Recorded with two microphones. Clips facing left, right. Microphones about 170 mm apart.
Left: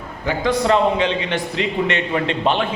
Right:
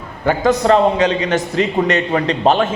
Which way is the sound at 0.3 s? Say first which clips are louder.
Right 4 dB; 45° right (ahead or behind).